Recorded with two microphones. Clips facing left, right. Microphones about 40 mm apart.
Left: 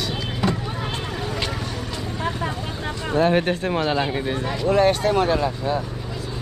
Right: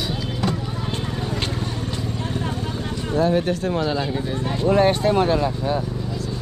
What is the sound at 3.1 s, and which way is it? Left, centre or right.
Speech, left.